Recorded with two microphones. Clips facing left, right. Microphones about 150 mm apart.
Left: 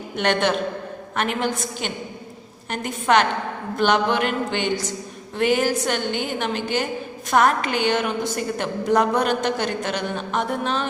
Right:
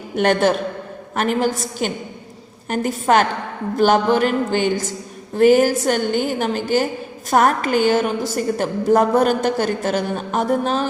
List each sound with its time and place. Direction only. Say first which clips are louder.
0.2 s a woman's voice: right 4 dB; 40° right (ahead or behind)